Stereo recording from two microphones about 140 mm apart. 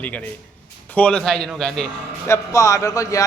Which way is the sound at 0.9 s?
10° left (ahead or behind).